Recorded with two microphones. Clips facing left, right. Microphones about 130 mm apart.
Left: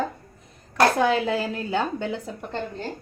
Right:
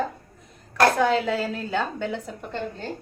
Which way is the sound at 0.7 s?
15° left (ahead or behind).